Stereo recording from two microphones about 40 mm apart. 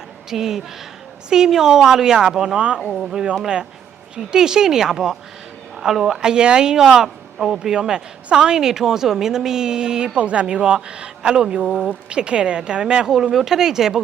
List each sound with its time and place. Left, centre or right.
0.3 s speech: centre
2.6 s speech: right
4.1 s speech: centre